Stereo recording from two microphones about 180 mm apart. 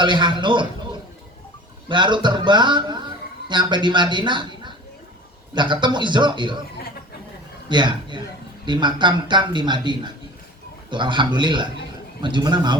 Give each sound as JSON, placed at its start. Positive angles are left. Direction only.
{"t": 0.0, "sound": "a man's voice", "side_deg": -25}
{"t": 1.9, "sound": "a man's voice", "side_deg": -25}
{"t": 7.7, "sound": "a man's voice", "side_deg": -25}